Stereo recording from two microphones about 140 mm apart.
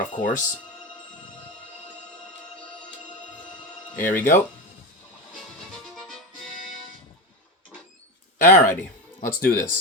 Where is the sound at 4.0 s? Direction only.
75° left (ahead or behind).